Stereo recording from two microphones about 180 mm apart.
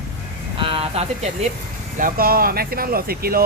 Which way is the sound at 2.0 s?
50° right (ahead or behind).